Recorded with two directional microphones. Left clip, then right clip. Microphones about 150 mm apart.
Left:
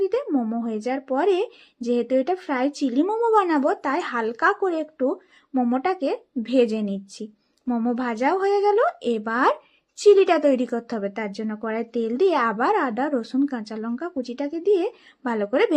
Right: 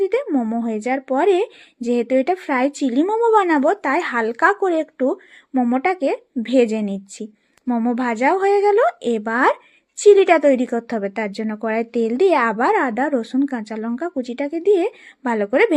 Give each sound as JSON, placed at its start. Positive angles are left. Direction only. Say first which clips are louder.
{"t": 0.0, "sound": "a woman's voice", "louder": "right 4 dB", "side_deg": -25}